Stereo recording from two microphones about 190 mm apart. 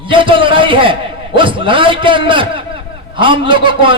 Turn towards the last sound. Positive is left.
turn(degrees=-25)  # may be behind; listen again after turning